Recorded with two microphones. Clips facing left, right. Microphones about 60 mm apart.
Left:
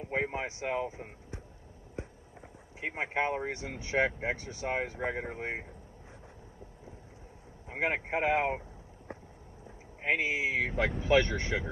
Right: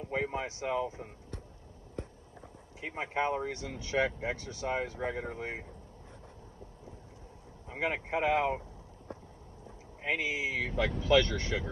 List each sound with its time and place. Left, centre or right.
0.0 s speech: left
3.0 s speech: left
7.6 s speech: left
10.0 s speech: left